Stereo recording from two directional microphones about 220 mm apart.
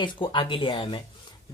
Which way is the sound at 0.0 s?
20° left (ahead or behind).